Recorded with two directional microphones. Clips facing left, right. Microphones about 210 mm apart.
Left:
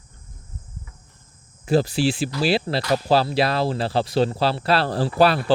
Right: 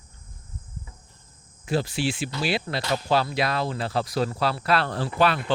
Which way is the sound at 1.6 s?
35° left (ahead or behind).